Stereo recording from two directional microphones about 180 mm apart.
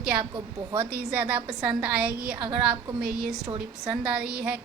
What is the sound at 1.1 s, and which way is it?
A woman's voice, 10° right (ahead or behind).